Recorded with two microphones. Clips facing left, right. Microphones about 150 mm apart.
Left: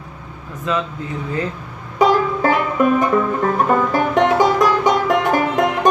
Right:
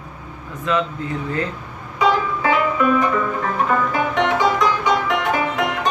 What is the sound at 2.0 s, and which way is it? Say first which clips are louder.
Music: left 4 dB; 45° left (ahead or behind).